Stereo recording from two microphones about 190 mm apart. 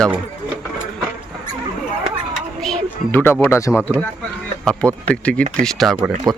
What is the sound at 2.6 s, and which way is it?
Speech, 5° left (ahead or behind).